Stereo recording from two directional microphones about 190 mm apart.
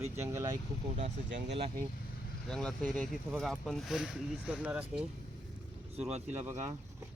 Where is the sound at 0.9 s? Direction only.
35° right (ahead or behind).